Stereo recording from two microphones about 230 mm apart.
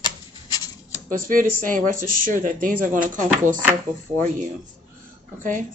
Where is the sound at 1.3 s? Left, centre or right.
Right.